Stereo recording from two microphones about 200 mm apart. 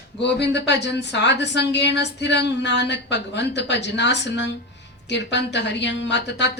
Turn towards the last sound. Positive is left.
turn(degrees=60)  # may be behind; listen again after turning